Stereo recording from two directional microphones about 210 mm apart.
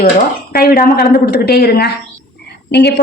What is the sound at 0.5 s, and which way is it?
A woman's voice, 45° left (ahead or behind).